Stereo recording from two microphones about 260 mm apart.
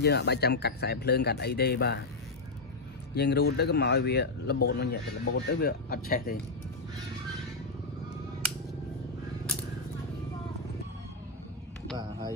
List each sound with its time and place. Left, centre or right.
0.0 s speech: left
3.2 s speech: left